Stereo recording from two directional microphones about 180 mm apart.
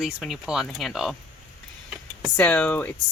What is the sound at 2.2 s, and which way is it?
Speech, 5° left (ahead or behind).